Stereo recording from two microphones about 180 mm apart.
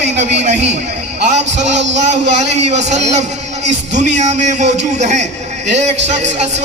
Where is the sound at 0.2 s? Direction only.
40° right (ahead or behind).